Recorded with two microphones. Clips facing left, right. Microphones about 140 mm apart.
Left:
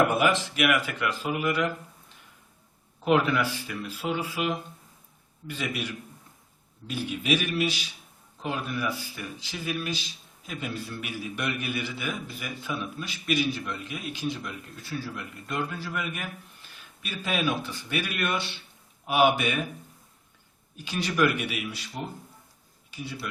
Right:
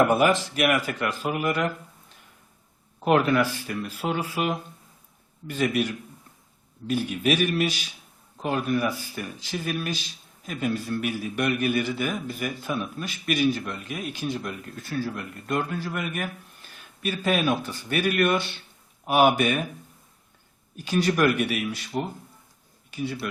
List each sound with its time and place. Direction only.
0.5 s speech: 40° right (ahead or behind)
3.0 s speech: 50° right (ahead or behind)
20.7 s speech: 45° right (ahead or behind)